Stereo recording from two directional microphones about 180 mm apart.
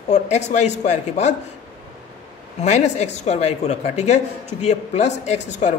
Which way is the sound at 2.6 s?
40° left (ahead or behind).